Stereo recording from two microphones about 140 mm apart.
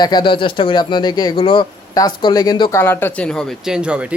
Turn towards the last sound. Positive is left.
turn(degrees=-10)  # may be behind; listen again after turning